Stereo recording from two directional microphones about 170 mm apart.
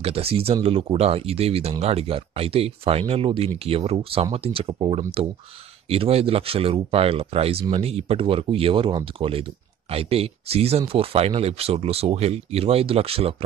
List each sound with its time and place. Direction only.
0.0 s speech: 35° right (ahead or behind)